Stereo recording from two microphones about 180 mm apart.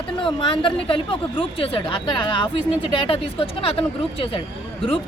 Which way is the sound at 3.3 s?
30° left (ahead or behind).